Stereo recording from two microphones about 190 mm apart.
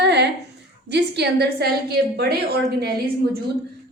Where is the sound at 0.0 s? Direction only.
60° right (ahead or behind).